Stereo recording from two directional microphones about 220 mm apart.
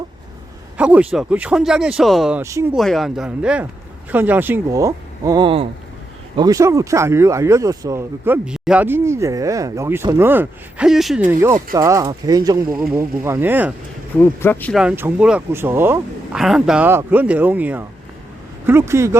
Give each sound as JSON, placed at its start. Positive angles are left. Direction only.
{"t": 0.8, "sound": "speech", "side_deg": -5}
{"t": 2.4, "sound": "speech", "side_deg": -15}
{"t": 2.7, "sound": "speech", "side_deg": 0}
{"t": 14.2, "sound": "speech", "side_deg": 10}